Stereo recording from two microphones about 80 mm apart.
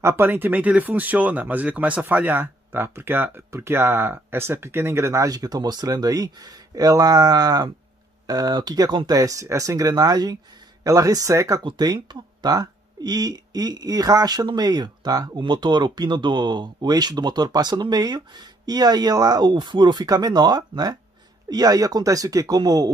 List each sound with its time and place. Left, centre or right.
0.0 s speech: right
5.3 s speech: right
11.6 s speech: right
15.4 s speech: right